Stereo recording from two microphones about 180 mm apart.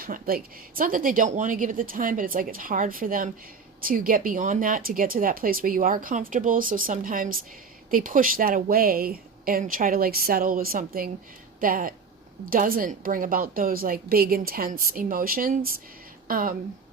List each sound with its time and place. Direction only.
0.0 s speech: 55° right (ahead or behind)